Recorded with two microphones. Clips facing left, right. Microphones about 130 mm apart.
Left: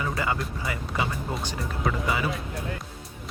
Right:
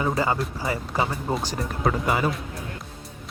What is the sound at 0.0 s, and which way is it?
Speech, 30° right (ahead or behind).